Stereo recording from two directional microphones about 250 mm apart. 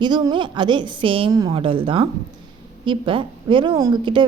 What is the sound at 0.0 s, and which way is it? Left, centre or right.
A woman's voice, centre.